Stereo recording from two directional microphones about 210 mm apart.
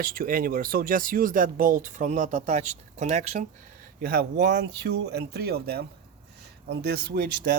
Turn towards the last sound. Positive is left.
turn(degrees=-55)  # may be behind; listen again after turning